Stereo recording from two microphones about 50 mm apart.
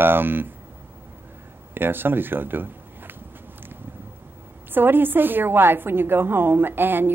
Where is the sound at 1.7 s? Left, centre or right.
Right.